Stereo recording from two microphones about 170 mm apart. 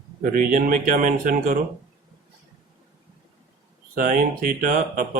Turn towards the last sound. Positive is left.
turn(degrees=-50)  # may be behind; listen again after turning